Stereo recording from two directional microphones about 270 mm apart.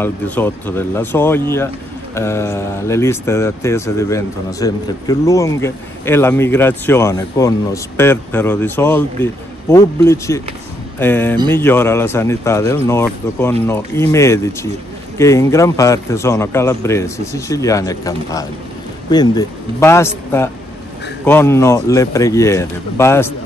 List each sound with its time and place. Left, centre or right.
0.0 s speech: centre